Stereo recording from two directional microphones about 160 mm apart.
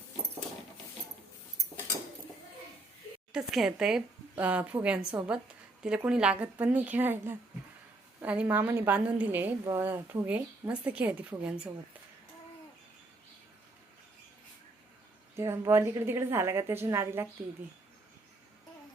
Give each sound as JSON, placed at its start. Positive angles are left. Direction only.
{"t": 3.3, "sound": "a woman's voice", "side_deg": -5}
{"t": 15.4, "sound": "a woman's voice", "side_deg": -15}